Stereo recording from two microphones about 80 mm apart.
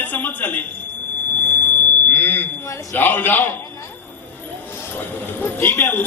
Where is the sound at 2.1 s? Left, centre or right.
Left.